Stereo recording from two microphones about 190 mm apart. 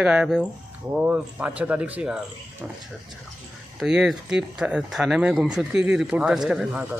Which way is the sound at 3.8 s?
5° right (ahead or behind).